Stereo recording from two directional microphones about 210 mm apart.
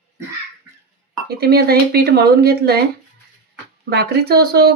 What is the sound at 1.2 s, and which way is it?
Speech, 50° right (ahead or behind).